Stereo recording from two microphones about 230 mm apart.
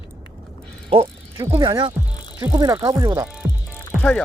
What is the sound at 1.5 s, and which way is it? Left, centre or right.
Speech, centre.